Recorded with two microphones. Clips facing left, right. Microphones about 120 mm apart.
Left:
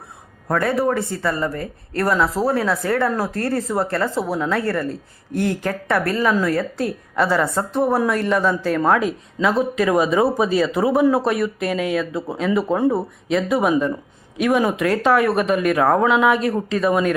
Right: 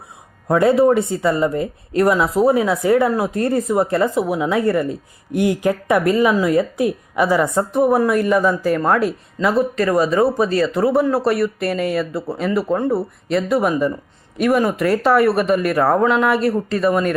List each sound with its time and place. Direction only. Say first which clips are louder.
0.4 s a woman's voice: right 6 dB; 20° right (ahead or behind); by 17.2 s centre (ahead or behind)